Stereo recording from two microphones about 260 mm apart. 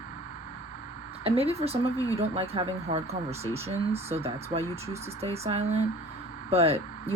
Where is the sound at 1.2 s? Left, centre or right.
Right.